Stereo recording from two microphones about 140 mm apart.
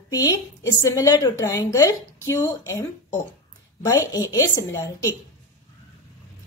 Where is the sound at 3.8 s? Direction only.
25° left (ahead or behind).